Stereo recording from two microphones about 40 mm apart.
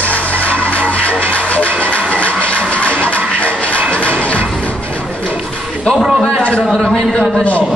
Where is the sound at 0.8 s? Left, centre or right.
Left.